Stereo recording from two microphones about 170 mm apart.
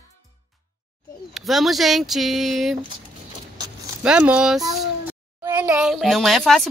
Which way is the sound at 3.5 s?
25° right (ahead or behind).